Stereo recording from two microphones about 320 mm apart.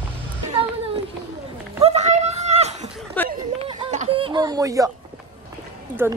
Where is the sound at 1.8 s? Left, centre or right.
Centre.